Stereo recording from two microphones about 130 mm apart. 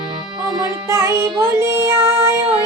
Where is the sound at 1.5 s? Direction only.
20° right (ahead or behind).